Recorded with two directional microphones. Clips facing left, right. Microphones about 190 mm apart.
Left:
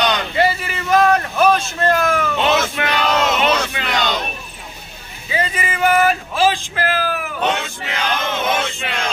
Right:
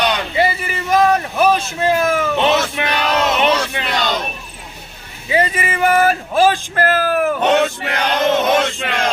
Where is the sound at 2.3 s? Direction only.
20° right (ahead or behind).